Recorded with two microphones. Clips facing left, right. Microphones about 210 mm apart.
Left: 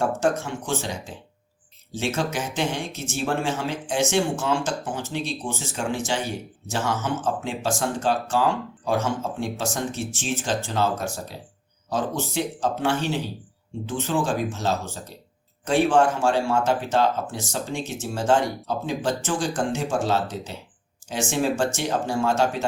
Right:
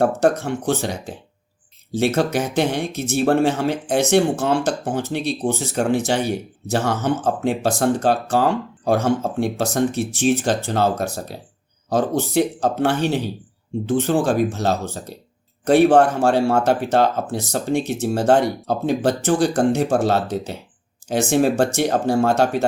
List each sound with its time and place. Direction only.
0.0 s speech: 60° right (ahead or behind)